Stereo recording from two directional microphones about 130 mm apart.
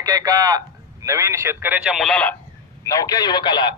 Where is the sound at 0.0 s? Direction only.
25° right (ahead or behind).